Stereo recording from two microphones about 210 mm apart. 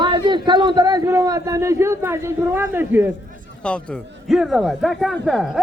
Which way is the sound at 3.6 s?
5° left (ahead or behind).